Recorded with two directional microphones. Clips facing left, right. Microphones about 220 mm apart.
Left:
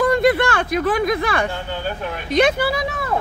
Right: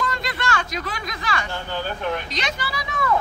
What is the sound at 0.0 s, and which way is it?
Speech, 55° left (ahead or behind).